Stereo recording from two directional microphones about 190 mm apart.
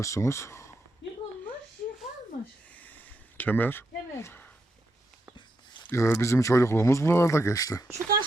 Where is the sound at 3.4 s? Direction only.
10° left (ahead or behind).